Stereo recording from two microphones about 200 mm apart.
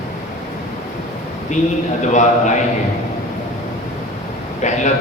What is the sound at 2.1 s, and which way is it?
Speech, 35° left (ahead or behind).